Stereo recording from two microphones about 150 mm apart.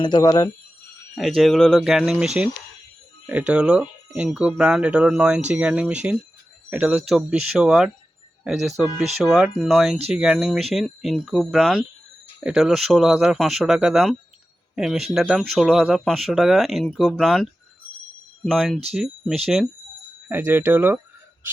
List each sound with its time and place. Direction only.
0.0 s speech: 30° left (ahead or behind)
1.4 s speech: 5° left (ahead or behind)
20.2 s speech: 10° right (ahead or behind)